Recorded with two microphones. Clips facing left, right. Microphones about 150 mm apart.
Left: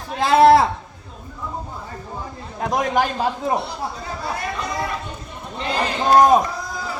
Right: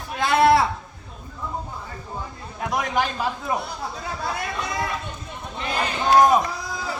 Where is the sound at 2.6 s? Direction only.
40° left (ahead or behind).